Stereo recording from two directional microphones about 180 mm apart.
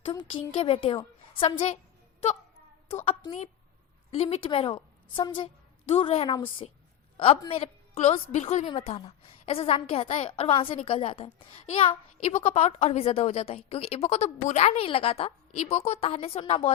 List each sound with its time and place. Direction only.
0.0 s a woman's voice: 30° left (ahead or behind)
2.9 s a woman's voice: 30° left (ahead or behind)